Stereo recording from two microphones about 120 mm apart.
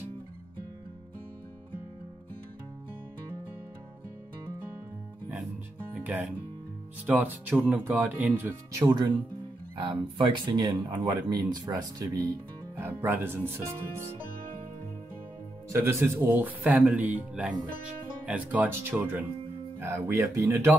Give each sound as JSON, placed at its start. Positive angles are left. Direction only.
{"t": 5.9, "sound": "music", "side_deg": -10}
{"t": 7.1, "sound": "speech", "side_deg": -15}
{"t": 9.8, "sound": "speech", "side_deg": -40}
{"t": 15.7, "sound": "speech", "side_deg": -20}